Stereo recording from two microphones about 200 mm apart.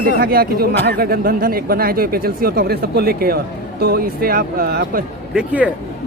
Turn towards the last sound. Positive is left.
turn(degrees=-5)  # may be behind; listen again after turning